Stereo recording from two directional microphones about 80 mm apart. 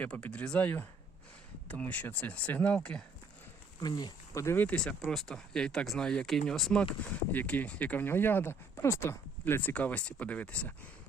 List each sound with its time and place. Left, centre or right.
0.0 s speech: centre
3.8 s speech: left
4.5 s speech: centre
7.0 s speech: centre